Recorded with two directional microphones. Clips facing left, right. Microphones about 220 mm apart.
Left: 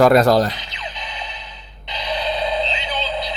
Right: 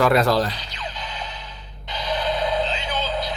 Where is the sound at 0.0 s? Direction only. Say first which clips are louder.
Left 5 dB; 40° left (ahead or behind).